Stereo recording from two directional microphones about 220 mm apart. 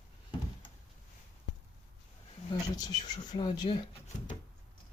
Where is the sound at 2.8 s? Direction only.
15° left (ahead or behind).